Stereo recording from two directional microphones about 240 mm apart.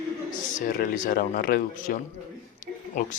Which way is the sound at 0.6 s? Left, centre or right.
Left.